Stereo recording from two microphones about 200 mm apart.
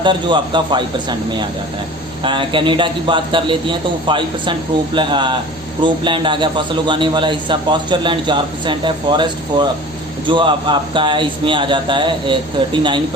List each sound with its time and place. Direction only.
0.0 s a man's voice: 25° right (ahead or behind)
2.2 s a man's voice: 25° right (ahead or behind)